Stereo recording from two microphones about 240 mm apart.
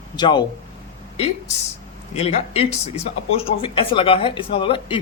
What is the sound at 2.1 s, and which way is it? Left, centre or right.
A man's voice, left.